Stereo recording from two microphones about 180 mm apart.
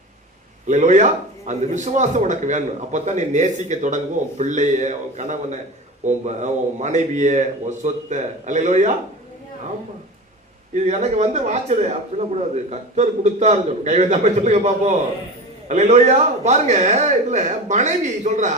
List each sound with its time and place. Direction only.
0.7 s a man's voice: 40° right (ahead or behind)
10.8 s a man's voice: 40° right (ahead or behind)